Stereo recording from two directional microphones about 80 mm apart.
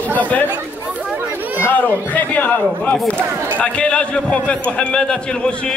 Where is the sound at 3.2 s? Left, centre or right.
Right.